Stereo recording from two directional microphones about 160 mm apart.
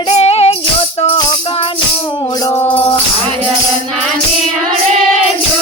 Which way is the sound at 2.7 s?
35° left (ahead or behind).